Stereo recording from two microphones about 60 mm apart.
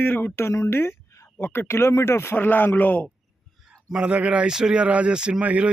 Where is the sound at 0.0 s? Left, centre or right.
Left.